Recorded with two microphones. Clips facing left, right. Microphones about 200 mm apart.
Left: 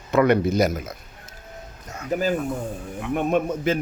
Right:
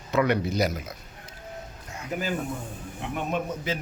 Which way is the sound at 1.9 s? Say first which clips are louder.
Left 7 dB; 40° left (ahead or behind).